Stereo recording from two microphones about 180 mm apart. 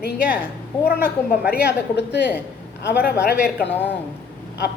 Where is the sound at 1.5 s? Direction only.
65° left (ahead or behind).